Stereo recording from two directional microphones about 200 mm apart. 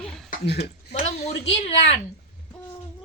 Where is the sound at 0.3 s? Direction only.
50° left (ahead or behind).